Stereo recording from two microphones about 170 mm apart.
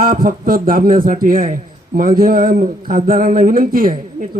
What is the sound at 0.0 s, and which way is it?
A man's voice, 55° right (ahead or behind).